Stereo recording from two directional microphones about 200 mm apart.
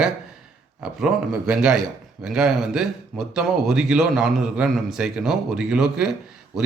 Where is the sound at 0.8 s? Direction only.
Centre (ahead or behind).